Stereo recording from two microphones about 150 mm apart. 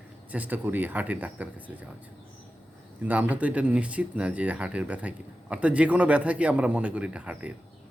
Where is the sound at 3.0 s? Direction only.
10° right (ahead or behind).